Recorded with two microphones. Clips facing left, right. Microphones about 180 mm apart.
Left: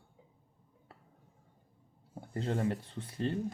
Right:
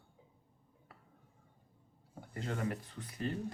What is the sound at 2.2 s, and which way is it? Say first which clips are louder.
Speech: left 5 dB; 30° left (ahead or behind).